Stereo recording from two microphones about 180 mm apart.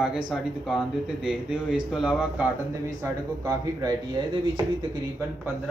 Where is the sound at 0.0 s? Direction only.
Centre (ahead or behind).